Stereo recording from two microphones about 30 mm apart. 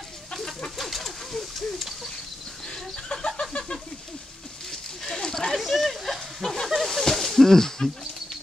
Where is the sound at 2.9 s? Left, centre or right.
Left.